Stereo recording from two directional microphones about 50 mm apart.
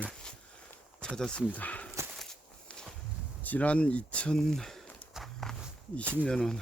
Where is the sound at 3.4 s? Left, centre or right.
Left.